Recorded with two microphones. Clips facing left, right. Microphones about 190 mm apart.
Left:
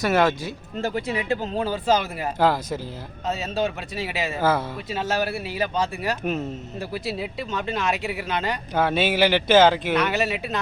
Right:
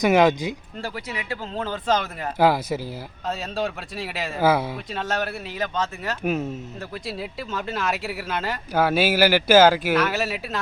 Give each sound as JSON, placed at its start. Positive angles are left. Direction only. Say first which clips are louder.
{"t": 0.0, "sound": "speech", "louder": "right 3 dB", "side_deg": -15}
{"t": 0.8, "sound": "speech", "louder": "left 6 dB", "side_deg": 25}
{"t": 1.5, "sound": "speech", "louder": "left 1 dB", "side_deg": 10}
{"t": 2.4, "sound": "speech", "louder": "right 2 dB", "side_deg": -10}
{"t": 3.2, "sound": "speech", "louder": "left 2 dB", "side_deg": 0}
{"t": 4.4, "sound": "speech", "louder": "right 3 dB", "side_deg": -10}
{"t": 4.9, "sound": "speech", "louder": "left 6 dB", "side_deg": 5}